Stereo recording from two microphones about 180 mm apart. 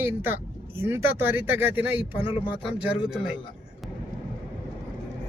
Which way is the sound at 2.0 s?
30° left (ahead or behind).